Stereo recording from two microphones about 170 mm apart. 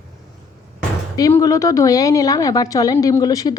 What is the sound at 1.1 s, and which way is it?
A woman's voice, 20° left (ahead or behind).